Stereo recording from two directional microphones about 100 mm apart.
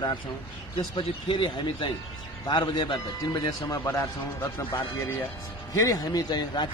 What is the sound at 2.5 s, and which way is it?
Speech, 45° left (ahead or behind).